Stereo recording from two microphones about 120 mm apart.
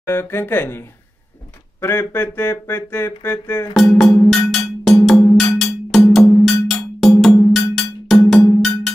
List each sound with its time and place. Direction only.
0.0 s a sound: 20° left (ahead or behind)
3.7 s cowbell: centre (ahead or behind)
8.5 s percussion: centre (ahead or behind)